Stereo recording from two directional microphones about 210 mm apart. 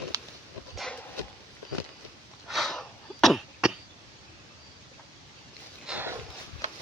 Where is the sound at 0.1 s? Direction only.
15° right (ahead or behind).